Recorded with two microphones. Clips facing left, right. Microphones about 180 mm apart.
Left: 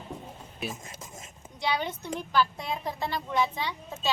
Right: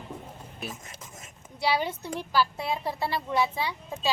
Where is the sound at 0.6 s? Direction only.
Centre (ahead or behind).